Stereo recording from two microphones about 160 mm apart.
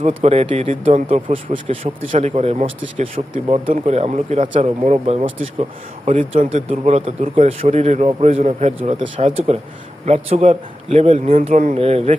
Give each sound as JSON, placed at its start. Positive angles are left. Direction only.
{"t": 0.1, "sound": "speech", "side_deg": -40}
{"t": 11.3, "sound": "speech", "side_deg": -50}